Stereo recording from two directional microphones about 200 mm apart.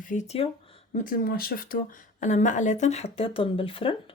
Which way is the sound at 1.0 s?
45° left (ahead or behind).